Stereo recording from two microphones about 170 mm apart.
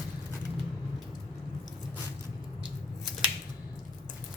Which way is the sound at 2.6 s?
5° right (ahead or behind).